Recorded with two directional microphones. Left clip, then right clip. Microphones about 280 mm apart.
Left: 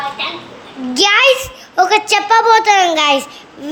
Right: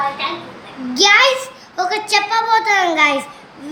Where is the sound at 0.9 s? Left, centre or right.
Centre.